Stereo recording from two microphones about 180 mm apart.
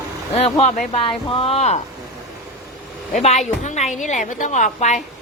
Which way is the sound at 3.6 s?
40° left (ahead or behind).